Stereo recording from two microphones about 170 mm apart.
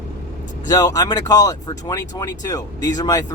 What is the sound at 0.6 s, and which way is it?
Speech, 20° left (ahead or behind).